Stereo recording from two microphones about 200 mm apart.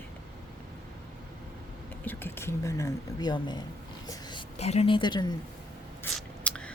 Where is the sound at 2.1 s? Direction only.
10° left (ahead or behind).